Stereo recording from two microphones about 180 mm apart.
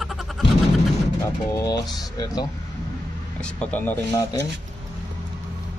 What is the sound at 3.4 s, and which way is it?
Speech, 5° left (ahead or behind).